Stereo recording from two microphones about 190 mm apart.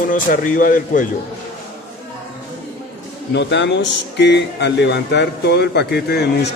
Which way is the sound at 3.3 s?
65° left (ahead or behind).